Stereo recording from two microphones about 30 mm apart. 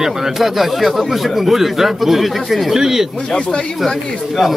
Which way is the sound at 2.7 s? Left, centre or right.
Centre.